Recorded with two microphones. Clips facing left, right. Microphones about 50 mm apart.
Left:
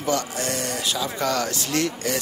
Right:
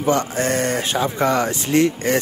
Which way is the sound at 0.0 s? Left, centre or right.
Right.